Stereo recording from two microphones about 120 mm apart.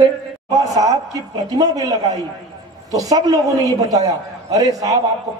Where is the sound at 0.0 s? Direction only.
30° right (ahead or behind).